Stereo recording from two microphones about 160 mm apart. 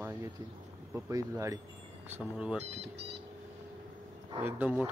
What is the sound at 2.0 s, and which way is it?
Speech, 10° right (ahead or behind).